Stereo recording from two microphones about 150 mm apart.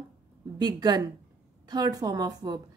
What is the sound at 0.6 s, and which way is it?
Speech, 25° right (ahead or behind).